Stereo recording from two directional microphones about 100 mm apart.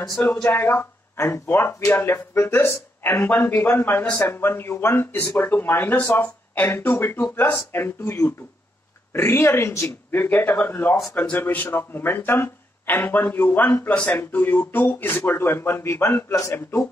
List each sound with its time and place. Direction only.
0.0 s speech: 5° left (ahead or behind)
0.3 s speech: 20° left (ahead or behind)